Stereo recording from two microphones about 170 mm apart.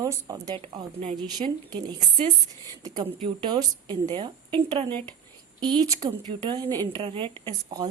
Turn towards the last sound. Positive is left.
turn(degrees=-20)  # may be behind; listen again after turning